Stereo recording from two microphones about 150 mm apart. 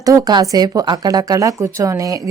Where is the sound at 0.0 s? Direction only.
25° right (ahead or behind).